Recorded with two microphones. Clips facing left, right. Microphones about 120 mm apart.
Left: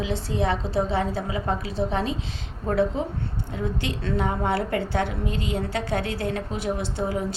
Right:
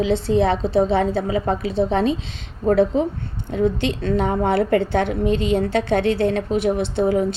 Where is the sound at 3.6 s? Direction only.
25° right (ahead or behind).